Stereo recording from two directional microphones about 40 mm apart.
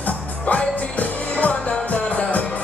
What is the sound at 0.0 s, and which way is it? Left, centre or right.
Music, left.